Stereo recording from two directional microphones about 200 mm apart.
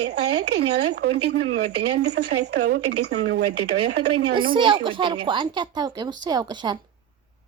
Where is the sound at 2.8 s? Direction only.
75° right (ahead or behind); by 4.3 s 55° right (ahead or behind).